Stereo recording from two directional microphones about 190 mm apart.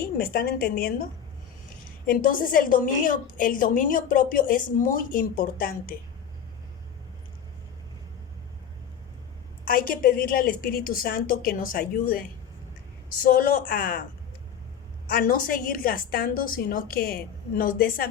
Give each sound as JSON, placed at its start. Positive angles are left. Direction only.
{"t": 0.2, "sound": "a woman's voice", "side_deg": 50}
{"t": 2.0, "sound": "a woman's voice", "side_deg": 45}
{"t": 9.6, "sound": "a woman's voice", "side_deg": 50}
{"t": 15.1, "sound": "a woman's voice", "side_deg": 50}